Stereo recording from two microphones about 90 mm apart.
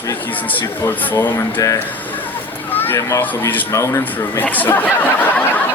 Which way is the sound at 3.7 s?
35° left (ahead or behind).